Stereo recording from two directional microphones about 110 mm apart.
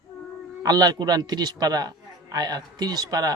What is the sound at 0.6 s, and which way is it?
A man's voice, 35° right (ahead or behind).